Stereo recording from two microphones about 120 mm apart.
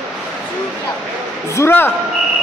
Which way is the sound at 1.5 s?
20° left (ahead or behind).